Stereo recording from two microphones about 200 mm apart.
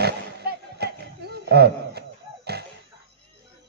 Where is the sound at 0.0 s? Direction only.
55° right (ahead or behind).